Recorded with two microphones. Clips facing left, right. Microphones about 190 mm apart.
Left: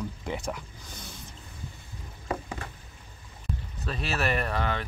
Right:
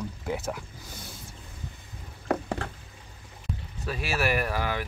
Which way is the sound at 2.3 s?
65° right (ahead or behind).